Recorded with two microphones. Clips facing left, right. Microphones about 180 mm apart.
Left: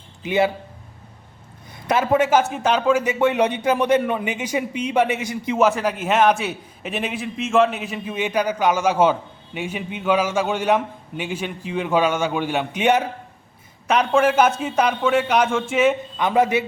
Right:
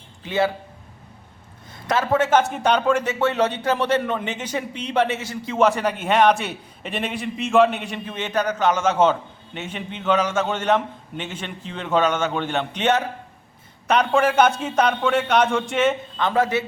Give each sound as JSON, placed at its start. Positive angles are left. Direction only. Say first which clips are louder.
{"t": 0.2, "sound": "a man's voice", "louder": "left 2 dB", "side_deg": 15}
{"t": 1.9, "sound": "a man's voice", "louder": "left 1 dB", "side_deg": 15}
{"t": 5.5, "sound": "a man's voice", "louder": "even", "side_deg": 5}